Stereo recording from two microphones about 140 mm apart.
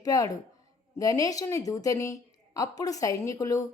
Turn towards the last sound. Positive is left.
turn(degrees=25)  # may be behind; listen again after turning